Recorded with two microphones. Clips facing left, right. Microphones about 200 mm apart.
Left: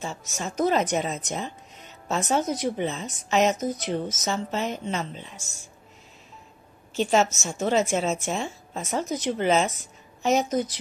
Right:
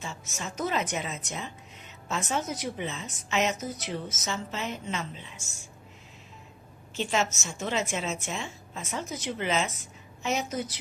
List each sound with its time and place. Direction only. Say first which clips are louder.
0.0 s speech: left 5 dB; 40° left (ahead or behind)
7.0 s speech: left 7 dB; 40° left (ahead or behind)